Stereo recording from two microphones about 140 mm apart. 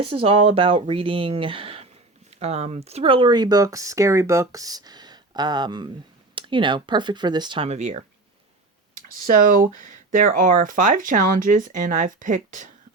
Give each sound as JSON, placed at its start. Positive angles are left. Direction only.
{"t": 0.0, "sound": "speech", "side_deg": -45}
{"t": 7.7, "sound": "speech", "side_deg": -55}
{"t": 9.2, "sound": "speech", "side_deg": -75}